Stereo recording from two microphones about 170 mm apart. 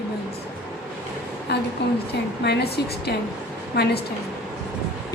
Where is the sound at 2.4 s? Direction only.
75° left (ahead or behind).